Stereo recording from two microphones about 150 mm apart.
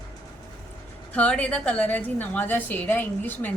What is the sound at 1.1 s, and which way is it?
A woman's voice, 10° left (ahead or behind).